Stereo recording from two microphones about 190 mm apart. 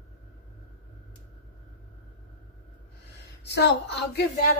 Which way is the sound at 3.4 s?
60° left (ahead or behind).